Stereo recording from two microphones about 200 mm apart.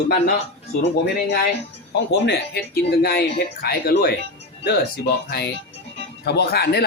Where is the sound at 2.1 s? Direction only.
50° left (ahead or behind).